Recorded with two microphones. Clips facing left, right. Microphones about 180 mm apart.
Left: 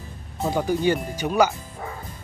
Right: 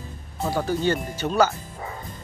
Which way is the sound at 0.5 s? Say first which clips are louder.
Left 2 dB; 15° left (ahead or behind).